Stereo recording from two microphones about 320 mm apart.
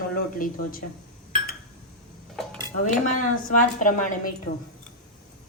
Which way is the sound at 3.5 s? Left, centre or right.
Left.